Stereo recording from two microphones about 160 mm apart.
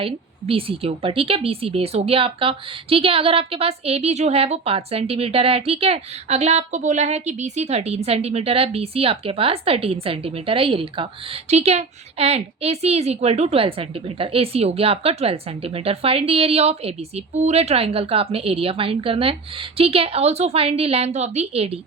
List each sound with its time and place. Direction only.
0.0 s speech: 35° right (ahead or behind)